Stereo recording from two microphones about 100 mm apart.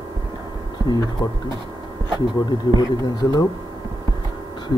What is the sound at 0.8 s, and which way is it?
Speech, 45° left (ahead or behind).